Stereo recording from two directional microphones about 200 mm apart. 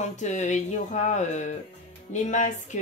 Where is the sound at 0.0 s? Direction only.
35° left (ahead or behind).